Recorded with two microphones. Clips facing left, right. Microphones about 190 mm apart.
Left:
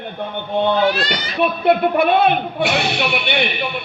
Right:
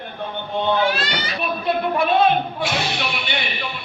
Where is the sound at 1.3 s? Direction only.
65° left (ahead or behind).